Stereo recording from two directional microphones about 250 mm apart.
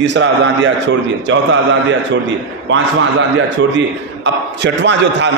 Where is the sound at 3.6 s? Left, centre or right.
Right.